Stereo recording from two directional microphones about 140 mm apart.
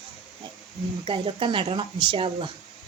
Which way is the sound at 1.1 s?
40° right (ahead or behind).